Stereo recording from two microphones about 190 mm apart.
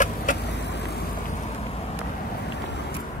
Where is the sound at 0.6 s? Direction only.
65° left (ahead or behind).